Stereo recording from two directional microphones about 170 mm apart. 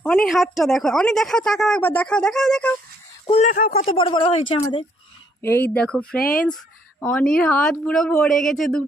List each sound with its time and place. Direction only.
0.0 s a woman's voice: 5° left (ahead or behind)
3.3 s speech: 45° left (ahead or behind)
3.8 s speech: 30° left (ahead or behind)
5.4 s speech: 10° left (ahead or behind)
6.1 s speech: 60° left (ahead or behind)
7.1 s a woman's voice: 5° left (ahead or behind)